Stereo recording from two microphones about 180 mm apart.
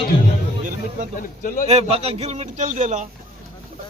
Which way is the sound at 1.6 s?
35° right (ahead or behind).